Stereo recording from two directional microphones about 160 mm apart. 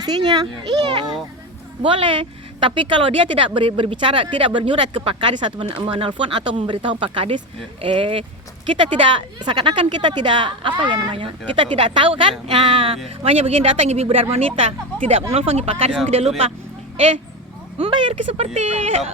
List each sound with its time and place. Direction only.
0.0 s a child's voice: 25° right (ahead or behind)
17.7 s a woman's voice: 35° right (ahead or behind)